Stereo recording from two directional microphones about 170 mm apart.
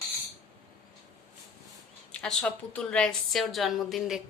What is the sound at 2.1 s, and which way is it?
A woman's voice, 5° left (ahead or behind).